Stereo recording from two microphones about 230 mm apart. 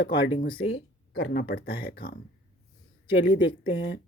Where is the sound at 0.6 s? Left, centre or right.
Left.